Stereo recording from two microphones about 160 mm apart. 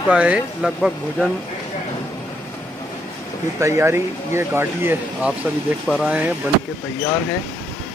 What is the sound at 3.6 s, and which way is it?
Speech, 15° right (ahead or behind).